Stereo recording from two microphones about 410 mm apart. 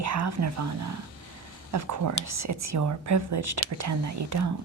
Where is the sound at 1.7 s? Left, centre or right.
Right.